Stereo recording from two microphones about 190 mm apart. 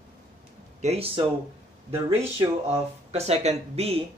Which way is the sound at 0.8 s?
30° right (ahead or behind).